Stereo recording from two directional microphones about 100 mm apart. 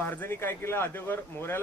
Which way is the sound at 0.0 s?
20° left (ahead or behind).